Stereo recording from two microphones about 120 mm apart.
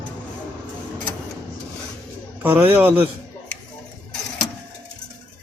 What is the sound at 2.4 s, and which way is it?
Speech, 15° right (ahead or behind).